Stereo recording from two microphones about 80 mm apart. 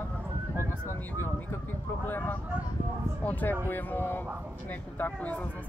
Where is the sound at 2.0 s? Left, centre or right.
Left.